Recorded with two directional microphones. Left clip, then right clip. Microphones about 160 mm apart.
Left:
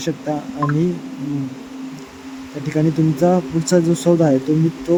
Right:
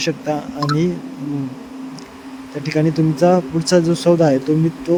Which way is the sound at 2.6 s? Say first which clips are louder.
Right 1 dB; 30° right (ahead or behind).